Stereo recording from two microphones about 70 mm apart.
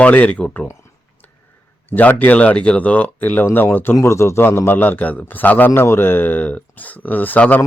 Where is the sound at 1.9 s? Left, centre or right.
Left.